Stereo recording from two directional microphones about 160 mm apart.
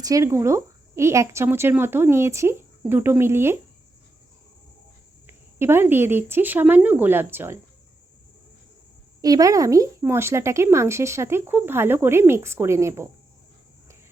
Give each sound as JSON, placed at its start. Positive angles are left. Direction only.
{"t": 0.0, "sound": "speech", "side_deg": -20}
{"t": 5.2, "sound": "speech", "side_deg": -15}
{"t": 9.2, "sound": "speech", "side_deg": -20}